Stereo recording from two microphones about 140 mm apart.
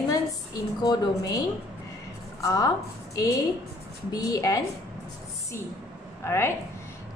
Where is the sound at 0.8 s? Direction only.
25° left (ahead or behind).